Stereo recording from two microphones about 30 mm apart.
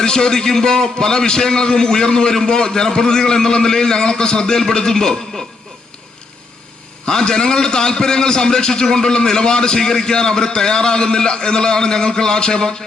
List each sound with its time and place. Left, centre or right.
0.0 s a man's voice: left
7.0 s a man's voice: left